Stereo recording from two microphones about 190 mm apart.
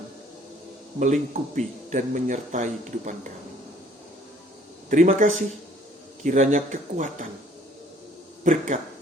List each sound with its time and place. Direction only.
0.9 s a man's voice: 40° right (ahead or behind)
4.9 s a man's voice: 40° right (ahead or behind)
8.4 s a man's voice: 40° right (ahead or behind)